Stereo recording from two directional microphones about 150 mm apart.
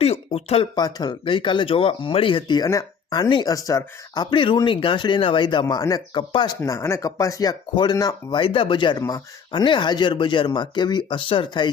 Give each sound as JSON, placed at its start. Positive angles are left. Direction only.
{"t": 0.0, "sound": "speech", "side_deg": 45}
{"t": 0.8, "sound": "speech", "side_deg": 25}
{"t": 6.6, "sound": "speech", "side_deg": 20}